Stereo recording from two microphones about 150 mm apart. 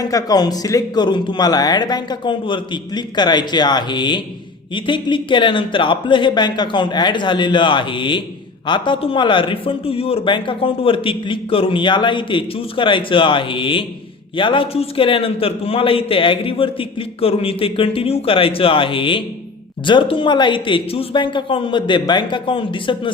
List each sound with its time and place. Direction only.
0.0 s a man's voice: 25° left (ahead or behind)